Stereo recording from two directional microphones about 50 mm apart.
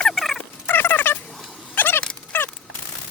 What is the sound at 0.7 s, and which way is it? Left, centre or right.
Cat, left.